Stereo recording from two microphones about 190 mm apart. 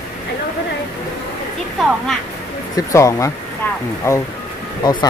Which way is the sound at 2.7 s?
15° left (ahead or behind).